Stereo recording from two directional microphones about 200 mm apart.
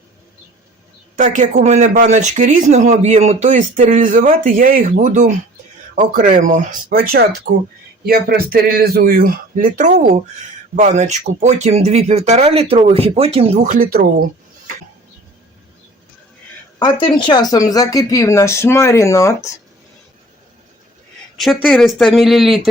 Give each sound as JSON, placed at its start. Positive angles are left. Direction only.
{"t": 1.1, "sound": "speech", "side_deg": -40}
{"t": 13.6, "sound": "speech", "side_deg": -45}
{"t": 16.8, "sound": "speech", "side_deg": 25}
{"t": 21.3, "sound": "speech", "side_deg": 0}